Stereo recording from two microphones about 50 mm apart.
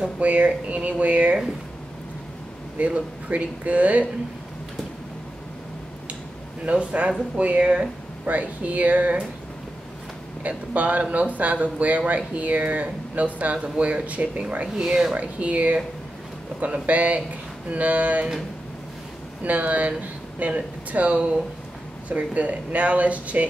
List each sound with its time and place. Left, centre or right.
0.2 s speech: right
2.8 s speech: right
6.6 s speech: right
8.3 s speech: right
10.4 s speech: right
14.7 s speech: centre
15.1 s speech: right
19.4 s speech: right